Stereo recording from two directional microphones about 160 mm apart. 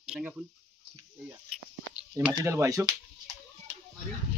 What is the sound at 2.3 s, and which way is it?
Speech, 20° right (ahead or behind).